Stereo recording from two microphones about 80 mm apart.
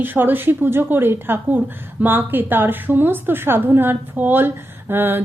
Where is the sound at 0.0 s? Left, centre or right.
Right.